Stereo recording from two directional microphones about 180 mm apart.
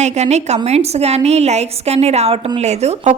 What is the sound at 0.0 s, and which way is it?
A woman's voice, 40° right (ahead or behind).